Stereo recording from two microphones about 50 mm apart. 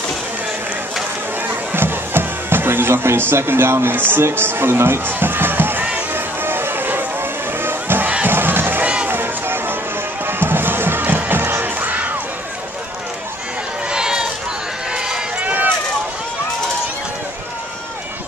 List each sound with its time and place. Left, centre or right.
1.5 s speech: right
6.1 s music: right
8.3 s crowd: right
8.8 s a sound: right
9.1 s run: right
10.2 s music: right
11.8 s crowd: right
13.8 s run: centre
15.4 s run: right